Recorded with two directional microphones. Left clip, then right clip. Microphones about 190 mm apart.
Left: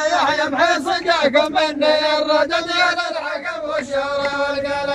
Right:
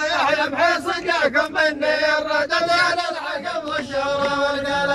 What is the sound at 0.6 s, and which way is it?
Chant, 15° left (ahead or behind).